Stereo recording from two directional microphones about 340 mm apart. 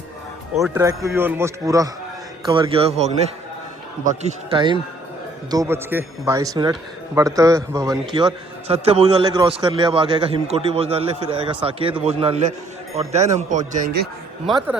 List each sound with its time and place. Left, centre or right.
0.6 s a man's voice: centre
14.4 s speech: centre